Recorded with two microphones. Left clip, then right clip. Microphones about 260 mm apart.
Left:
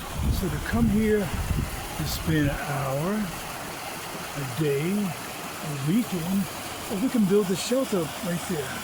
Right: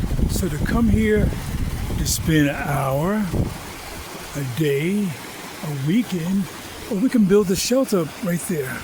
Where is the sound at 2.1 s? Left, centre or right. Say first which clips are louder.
Right 7 dB; right.